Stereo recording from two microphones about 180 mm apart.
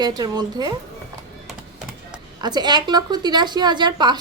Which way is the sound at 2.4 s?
25° right (ahead or behind).